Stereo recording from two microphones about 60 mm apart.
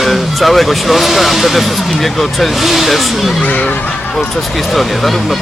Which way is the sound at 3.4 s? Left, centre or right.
Left.